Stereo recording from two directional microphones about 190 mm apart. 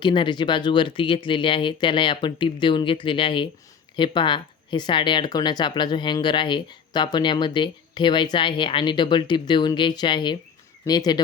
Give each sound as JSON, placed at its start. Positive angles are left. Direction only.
{"t": 0.0, "sound": "speech", "side_deg": 25}